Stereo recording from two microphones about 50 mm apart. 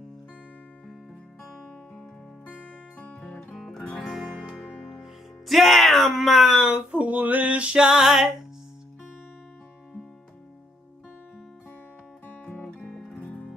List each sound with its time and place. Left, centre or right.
1.4 s music: centre
3.2 s music: centre
4.1 s music: centre
5.5 s speech: centre
6.9 s music: right; by 8.3 s centre
12.4 s music: centre
13.1 s music: left